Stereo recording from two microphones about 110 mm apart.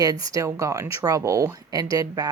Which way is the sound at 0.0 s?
35° right (ahead or behind).